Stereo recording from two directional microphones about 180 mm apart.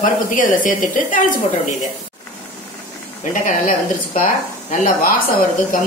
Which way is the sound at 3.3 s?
50° left (ahead or behind).